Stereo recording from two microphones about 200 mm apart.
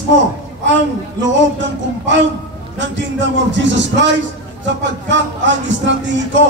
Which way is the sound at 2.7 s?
65° right (ahead or behind).